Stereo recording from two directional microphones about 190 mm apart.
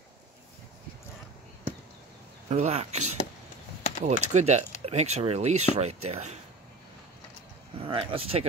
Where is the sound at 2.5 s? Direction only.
35° right (ahead or behind).